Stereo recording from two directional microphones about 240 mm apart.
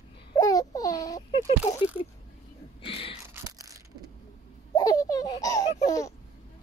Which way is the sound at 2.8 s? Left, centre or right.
Left.